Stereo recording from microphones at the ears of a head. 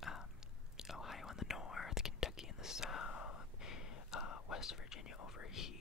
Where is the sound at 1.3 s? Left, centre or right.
Left.